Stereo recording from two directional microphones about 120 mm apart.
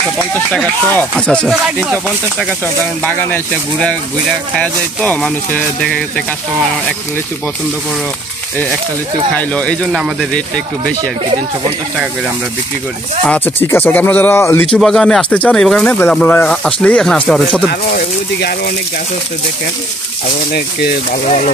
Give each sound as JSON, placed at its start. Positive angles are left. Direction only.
{"t": 0.9, "sound": "speech", "side_deg": 10}
{"t": 1.5, "sound": "speech", "side_deg": -10}
{"t": 2.3, "sound": "speech", "side_deg": 10}
{"t": 4.6, "sound": "speech", "side_deg": 10}
{"t": 9.4, "sound": "speech", "side_deg": 10}
{"t": 13.2, "sound": "speech", "side_deg": 10}
{"t": 14.7, "sound": "speech", "side_deg": 5}